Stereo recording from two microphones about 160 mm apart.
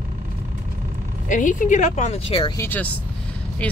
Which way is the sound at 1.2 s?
55° left (ahead or behind).